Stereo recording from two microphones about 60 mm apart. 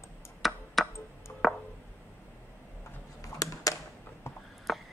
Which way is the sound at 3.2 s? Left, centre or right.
Left.